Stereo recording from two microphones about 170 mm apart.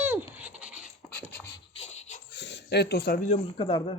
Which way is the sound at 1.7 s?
40° left (ahead or behind).